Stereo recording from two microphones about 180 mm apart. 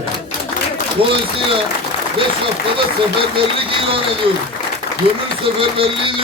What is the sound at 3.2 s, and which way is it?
A man's voice, 30° right (ahead or behind).